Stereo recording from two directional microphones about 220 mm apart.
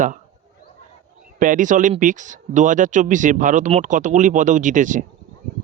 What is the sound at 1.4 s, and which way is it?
Speech, 35° right (ahead or behind).